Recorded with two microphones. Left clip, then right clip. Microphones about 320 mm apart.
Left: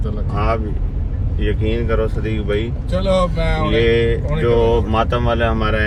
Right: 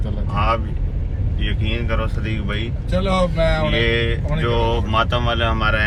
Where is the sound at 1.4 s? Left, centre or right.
Centre.